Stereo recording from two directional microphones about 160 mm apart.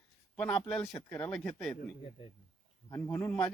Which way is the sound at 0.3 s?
5° left (ahead or behind).